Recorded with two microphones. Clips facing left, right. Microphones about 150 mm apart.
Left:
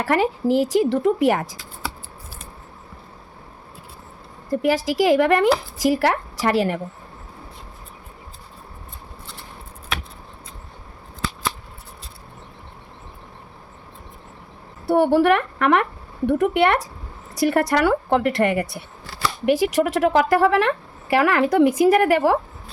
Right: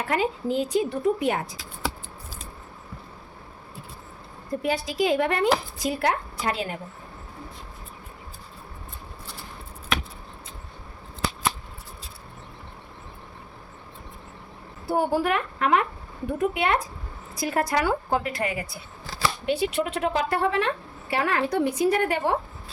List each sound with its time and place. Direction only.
0.0 s a woman's voice: 75° left (ahead or behind)
4.6 s a woman's voice: 90° left
14.8 s a woman's voice: 70° left (ahead or behind); by 22.4 s 90° left